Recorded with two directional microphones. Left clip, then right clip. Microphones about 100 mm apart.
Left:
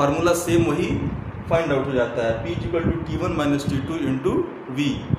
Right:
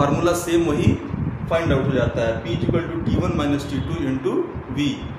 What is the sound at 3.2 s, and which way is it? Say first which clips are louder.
Speech: even; 40° left (ahead or behind).